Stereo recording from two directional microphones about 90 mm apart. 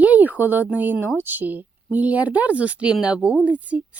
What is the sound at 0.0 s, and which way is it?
Speech, 15° right (ahead or behind).